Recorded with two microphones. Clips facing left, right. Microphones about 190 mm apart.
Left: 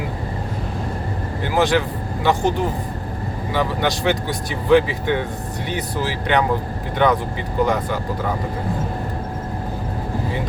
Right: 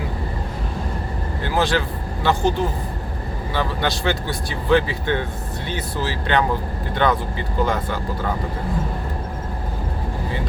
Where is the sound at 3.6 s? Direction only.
15° left (ahead or behind).